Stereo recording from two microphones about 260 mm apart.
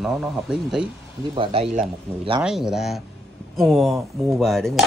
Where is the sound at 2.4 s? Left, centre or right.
Centre.